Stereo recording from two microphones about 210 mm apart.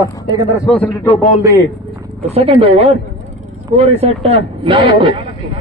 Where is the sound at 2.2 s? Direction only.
30° right (ahead or behind).